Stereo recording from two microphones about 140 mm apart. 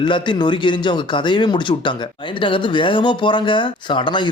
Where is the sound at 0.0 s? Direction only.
35° left (ahead or behind).